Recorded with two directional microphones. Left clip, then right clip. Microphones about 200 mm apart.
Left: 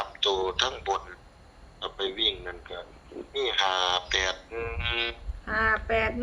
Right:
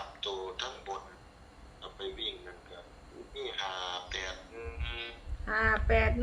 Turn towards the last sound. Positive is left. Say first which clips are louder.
# left 3 dB
turn(degrees=5)  # may be behind; listen again after turning